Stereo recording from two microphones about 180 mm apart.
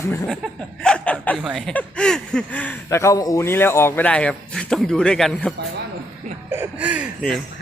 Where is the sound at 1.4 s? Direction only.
Centre (ahead or behind).